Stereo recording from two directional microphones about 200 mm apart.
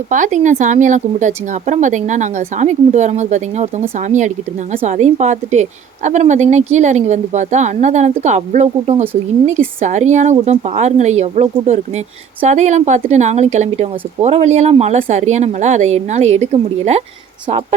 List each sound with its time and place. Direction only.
0.1 s a woman's voice: 40° right (ahead or behind)